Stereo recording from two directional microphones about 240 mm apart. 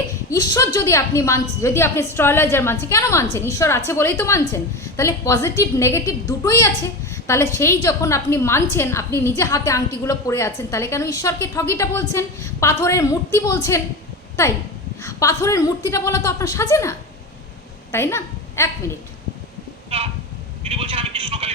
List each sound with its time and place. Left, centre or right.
0.3 s a woman's voice: centre
15.0 s a woman's voice: centre
17.9 s a woman's voice: centre
20.7 s speech: right